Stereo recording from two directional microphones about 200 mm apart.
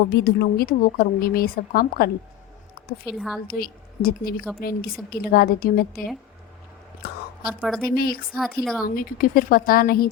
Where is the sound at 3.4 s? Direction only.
50° left (ahead or behind).